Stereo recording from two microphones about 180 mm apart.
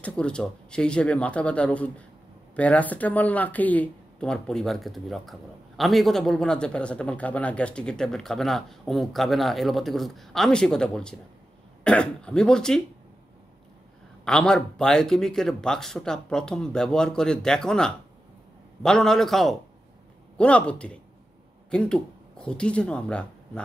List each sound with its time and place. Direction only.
0.0 s speech: 5° left (ahead or behind)
14.2 s speech: 5° left (ahead or behind)